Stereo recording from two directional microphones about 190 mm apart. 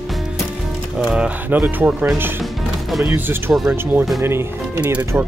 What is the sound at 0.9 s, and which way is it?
Speech, 5° right (ahead or behind).